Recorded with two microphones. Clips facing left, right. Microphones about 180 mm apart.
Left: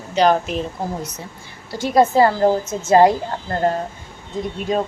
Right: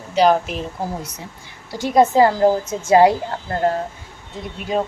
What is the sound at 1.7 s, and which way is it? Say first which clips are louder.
Speech: even; 15° right (ahead or behind).